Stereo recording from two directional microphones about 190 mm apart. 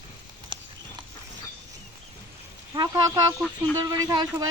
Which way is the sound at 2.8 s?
20° right (ahead or behind).